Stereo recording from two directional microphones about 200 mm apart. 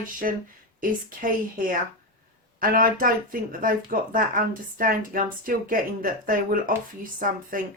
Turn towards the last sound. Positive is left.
turn(degrees=-45)  # may be behind; listen again after turning